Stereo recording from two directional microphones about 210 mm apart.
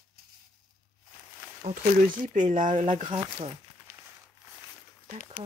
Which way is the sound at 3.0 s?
25° right (ahead or behind).